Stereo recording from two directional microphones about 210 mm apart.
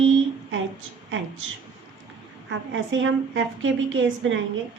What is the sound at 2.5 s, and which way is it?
A woman's voice, 65° right (ahead or behind).